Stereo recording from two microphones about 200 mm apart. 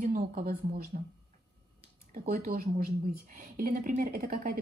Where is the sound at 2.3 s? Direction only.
45° right (ahead or behind).